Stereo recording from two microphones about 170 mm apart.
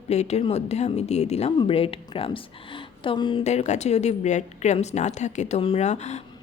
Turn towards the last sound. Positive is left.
turn(degrees=40)  # may be behind; listen again after turning